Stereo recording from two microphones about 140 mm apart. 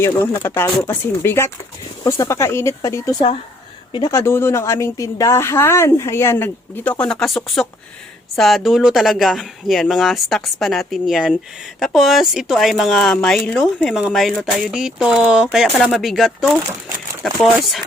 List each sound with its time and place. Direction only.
0.0 s speech: 15° left (ahead or behind)
7.0 s speech: 5° left (ahead or behind)